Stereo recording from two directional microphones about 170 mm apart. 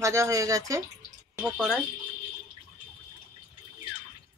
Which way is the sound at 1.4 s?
Centre (ahead or behind).